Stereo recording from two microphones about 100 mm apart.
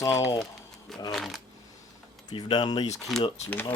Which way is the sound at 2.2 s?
45° left (ahead or behind).